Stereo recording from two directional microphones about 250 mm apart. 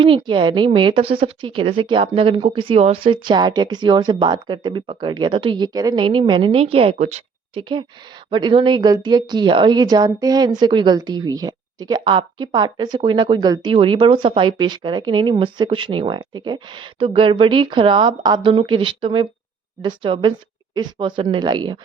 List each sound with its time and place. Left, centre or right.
0.0 s a woman's voice: right